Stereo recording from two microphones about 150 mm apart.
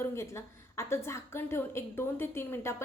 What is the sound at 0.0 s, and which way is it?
A woman's voice, 15° left (ahead or behind).